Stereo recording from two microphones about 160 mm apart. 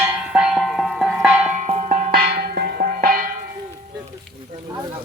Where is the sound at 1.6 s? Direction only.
45° right (ahead or behind).